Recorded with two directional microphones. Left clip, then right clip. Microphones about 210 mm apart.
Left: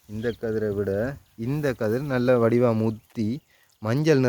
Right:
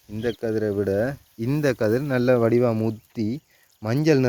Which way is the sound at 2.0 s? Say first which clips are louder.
Left 1 dB; 5° right (ahead or behind).